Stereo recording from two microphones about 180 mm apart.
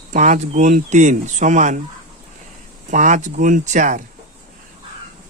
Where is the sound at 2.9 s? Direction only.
45° right (ahead or behind).